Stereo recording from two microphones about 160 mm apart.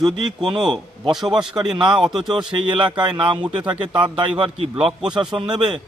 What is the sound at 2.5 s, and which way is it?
Speech, 30° right (ahead or behind).